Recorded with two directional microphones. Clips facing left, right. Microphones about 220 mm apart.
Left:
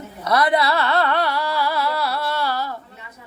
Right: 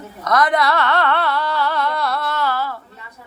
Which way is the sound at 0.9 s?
10° left (ahead or behind).